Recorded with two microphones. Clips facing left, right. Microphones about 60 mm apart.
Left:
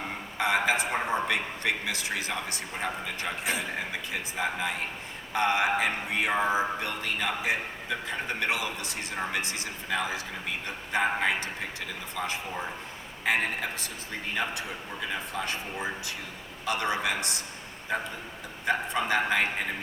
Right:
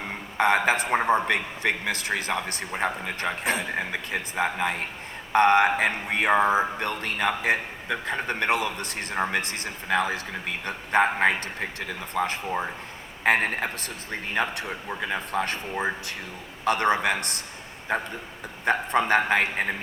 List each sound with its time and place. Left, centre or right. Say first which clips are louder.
0.3 s a man's voice: right 4 dB; right
1.0 s music: right 5 dB; right